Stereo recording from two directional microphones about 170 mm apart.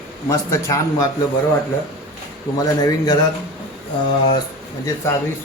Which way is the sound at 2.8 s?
20° left (ahead or behind).